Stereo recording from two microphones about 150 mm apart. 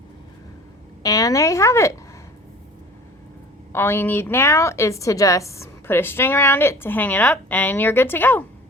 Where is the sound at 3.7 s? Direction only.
15° left (ahead or behind).